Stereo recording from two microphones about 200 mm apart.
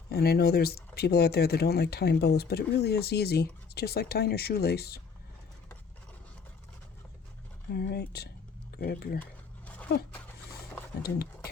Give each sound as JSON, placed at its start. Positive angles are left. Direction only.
{"t": 0.1, "sound": "speech", "side_deg": 50}
{"t": 7.7, "sound": "speech", "side_deg": 50}
{"t": 9.2, "sound": "a sound", "side_deg": 5}